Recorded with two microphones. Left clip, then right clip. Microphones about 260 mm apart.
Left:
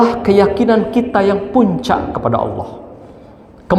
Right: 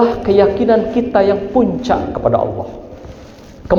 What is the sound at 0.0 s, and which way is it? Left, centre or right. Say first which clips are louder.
A man's voice: even; left.